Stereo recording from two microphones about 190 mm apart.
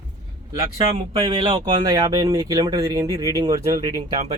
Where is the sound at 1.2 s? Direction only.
25° right (ahead or behind).